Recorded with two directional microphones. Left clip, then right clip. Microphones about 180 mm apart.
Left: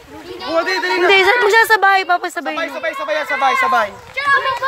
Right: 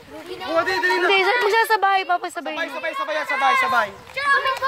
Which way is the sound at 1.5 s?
10° left (ahead or behind).